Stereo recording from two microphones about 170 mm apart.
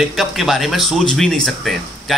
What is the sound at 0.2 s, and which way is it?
A man's voice, centre (ahead or behind).